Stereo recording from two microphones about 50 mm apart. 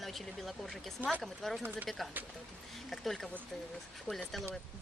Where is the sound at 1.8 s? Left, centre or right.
Centre.